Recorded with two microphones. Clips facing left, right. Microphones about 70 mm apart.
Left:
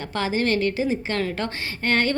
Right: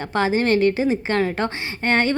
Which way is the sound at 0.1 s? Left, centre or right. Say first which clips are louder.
Right 4 dB; right.